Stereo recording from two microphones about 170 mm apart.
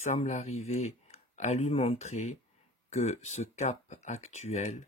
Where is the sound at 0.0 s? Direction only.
45° left (ahead or behind).